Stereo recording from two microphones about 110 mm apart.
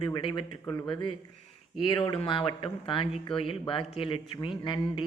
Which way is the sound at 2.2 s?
55° left (ahead or behind).